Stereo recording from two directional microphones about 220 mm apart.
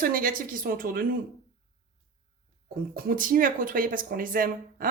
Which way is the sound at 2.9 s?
40° right (ahead or behind).